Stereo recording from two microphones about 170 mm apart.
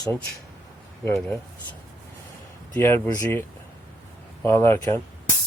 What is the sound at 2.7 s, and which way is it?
Speech, 15° left (ahead or behind).